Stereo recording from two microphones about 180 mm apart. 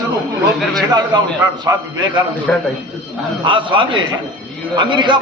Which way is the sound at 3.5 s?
30° right (ahead or behind).